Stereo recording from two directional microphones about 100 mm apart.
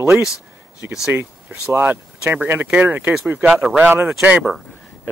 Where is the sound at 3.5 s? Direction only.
Centre (ahead or behind).